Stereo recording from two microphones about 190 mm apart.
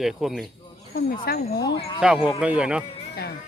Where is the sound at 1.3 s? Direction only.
50° left (ahead or behind).